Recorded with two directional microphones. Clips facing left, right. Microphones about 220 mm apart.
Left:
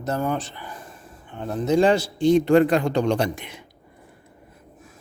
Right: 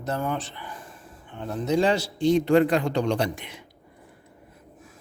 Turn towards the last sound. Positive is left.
turn(degrees=50)  # may be behind; listen again after turning